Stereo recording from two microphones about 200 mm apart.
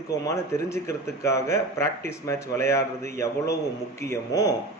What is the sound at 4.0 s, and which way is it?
Speech, 15° left (ahead or behind).